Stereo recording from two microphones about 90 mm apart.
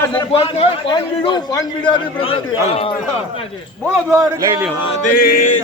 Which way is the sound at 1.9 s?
85° left.